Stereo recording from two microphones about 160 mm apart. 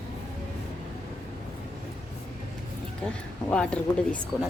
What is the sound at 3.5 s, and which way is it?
Speech, 5° left (ahead or behind).